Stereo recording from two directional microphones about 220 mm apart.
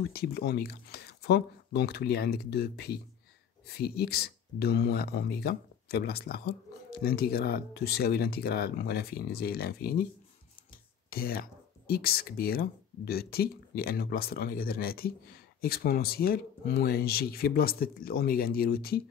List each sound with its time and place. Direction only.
0.0 s speech: 45° left (ahead or behind)
10.7 s a sound: 45° left (ahead or behind)
11.9 s speech: 45° left (ahead or behind)